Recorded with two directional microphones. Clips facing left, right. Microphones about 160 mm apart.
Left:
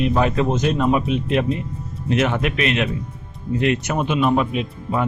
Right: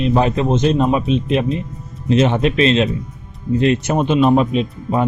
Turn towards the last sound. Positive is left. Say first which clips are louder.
# right 5 dB
turn(degrees=-25)  # may be behind; listen again after turning